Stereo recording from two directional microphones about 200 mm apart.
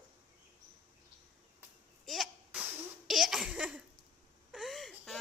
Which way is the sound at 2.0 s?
Centre (ahead or behind).